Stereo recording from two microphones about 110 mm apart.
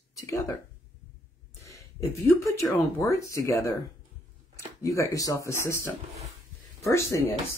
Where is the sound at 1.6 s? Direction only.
25° left (ahead or behind).